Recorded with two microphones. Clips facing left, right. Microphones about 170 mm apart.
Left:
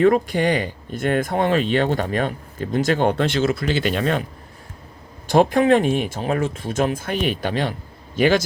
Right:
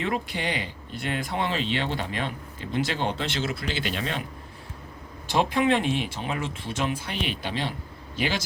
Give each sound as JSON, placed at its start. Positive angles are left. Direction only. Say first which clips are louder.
{"t": 0.0, "sound": "speech", "louder": "left 12 dB", "side_deg": 45}
{"t": 5.3, "sound": "speech", "louder": "left 8 dB", "side_deg": 45}